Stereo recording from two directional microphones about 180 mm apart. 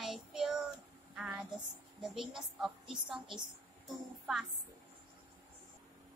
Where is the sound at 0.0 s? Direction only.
Centre (ahead or behind).